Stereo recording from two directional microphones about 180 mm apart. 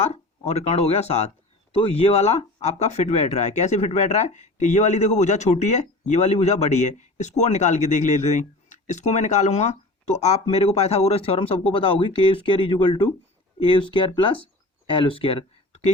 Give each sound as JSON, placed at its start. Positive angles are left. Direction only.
{"t": 0.0, "sound": "speech", "side_deg": 35}